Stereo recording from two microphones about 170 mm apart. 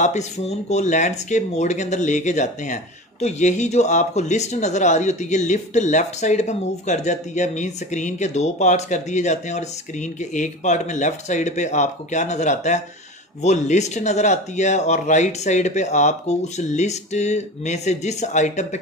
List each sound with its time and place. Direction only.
0.0 s speech: 45° left (ahead or behind)